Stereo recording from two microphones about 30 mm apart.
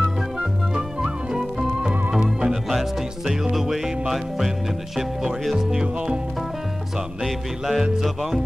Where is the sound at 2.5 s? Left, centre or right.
Centre.